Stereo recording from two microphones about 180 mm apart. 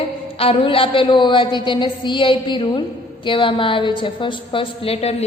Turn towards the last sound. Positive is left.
turn(degrees=30)  # may be behind; listen again after turning